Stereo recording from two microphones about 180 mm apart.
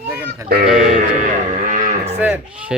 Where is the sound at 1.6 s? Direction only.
45° right (ahead or behind).